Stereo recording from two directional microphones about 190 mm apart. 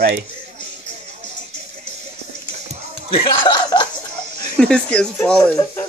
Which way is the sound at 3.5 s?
20° left (ahead or behind).